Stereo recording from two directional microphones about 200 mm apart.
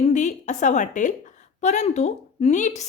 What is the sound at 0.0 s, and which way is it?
A woman's voice, 35° left (ahead or behind).